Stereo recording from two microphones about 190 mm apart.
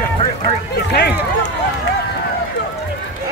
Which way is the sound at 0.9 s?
60° left (ahead or behind).